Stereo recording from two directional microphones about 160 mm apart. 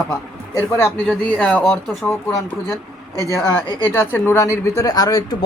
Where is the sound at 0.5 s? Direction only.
10° left (ahead or behind).